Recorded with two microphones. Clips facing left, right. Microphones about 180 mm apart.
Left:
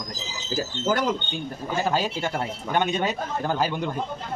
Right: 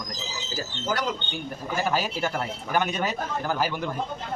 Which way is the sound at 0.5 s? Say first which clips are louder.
Left 5 dB; 50° left (ahead or behind).